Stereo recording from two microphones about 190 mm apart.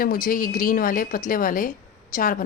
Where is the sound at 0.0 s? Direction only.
50° left (ahead or behind).